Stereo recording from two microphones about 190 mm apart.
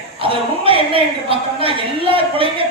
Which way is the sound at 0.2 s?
30° right (ahead or behind).